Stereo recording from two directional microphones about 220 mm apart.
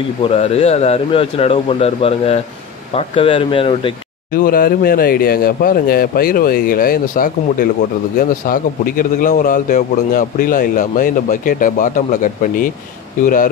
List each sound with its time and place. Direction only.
0.2 s speech: 30° left (ahead or behind)
4.3 s a man's voice: 40° left (ahead or behind)